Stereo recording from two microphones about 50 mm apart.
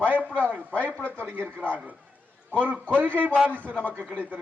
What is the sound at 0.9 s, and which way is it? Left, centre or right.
Speech, left.